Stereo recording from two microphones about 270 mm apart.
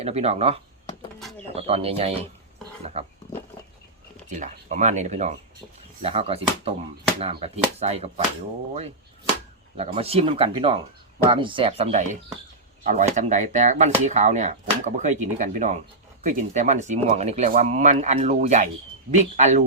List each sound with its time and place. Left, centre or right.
0.0 s speech: right
4.4 s speech: right
9.7 s speech: right